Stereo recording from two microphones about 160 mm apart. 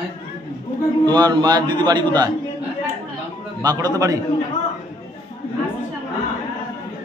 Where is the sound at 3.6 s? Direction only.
25° right (ahead or behind).